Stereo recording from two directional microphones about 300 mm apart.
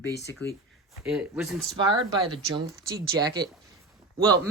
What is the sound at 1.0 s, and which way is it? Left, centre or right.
Speech, centre.